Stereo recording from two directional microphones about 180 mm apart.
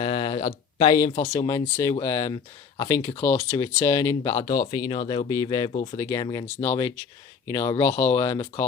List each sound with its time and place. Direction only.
0.0 s speech: 25° left (ahead or behind)
5.7 s speech: 35° left (ahead or behind)
6.0 s speech: 20° left (ahead or behind)